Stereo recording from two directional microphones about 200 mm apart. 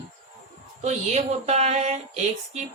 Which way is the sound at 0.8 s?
35° right (ahead or behind).